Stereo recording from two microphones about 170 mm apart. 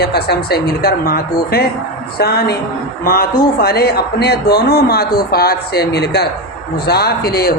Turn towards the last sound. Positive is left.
turn(degrees=65)  # may be behind; listen again after turning